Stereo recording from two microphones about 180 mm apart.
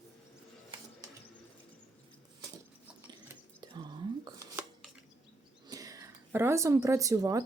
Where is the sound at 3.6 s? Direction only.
25° right (ahead or behind).